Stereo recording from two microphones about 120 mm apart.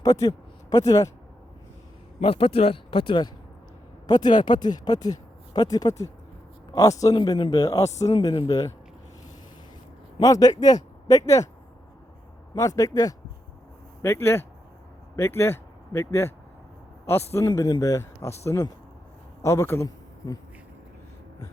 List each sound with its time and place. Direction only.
0.0 s speech: 30° left (ahead or behind)
2.2 s speech: 50° left (ahead or behind); by 8.7 s 30° left (ahead or behind)
10.2 s speech: 30° left (ahead or behind)
12.5 s a man's voice: 25° left (ahead or behind)